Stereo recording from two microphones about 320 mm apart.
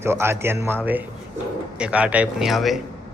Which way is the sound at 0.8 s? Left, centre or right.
Centre.